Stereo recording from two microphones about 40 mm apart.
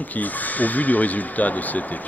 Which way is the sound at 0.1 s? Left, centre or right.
Left.